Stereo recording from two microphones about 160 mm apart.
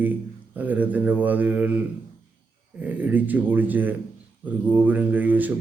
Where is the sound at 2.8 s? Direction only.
10° right (ahead or behind).